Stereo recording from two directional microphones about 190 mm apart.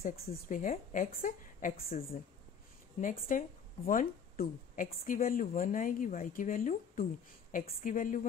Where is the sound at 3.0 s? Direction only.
45° left (ahead or behind).